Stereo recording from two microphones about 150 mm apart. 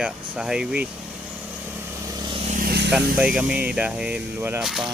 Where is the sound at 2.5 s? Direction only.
70° right (ahead or behind).